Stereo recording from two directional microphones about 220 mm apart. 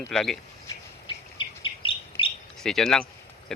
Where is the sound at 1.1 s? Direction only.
25° left (ahead or behind).